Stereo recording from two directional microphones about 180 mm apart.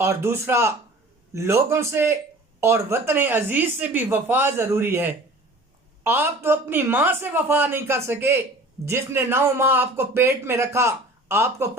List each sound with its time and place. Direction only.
0.0 s a man's voice: 15° right (ahead or behind)